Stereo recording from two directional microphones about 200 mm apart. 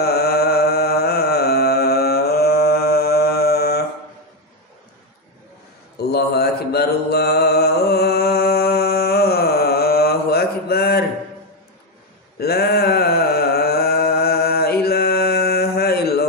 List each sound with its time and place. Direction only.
0.0 s music: 50° left (ahead or behind)
5.9 s mantra: 50° left (ahead or behind)
12.4 s a sound: 50° left (ahead or behind)